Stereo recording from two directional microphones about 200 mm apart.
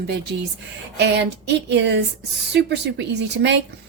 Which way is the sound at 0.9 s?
60° right (ahead or behind).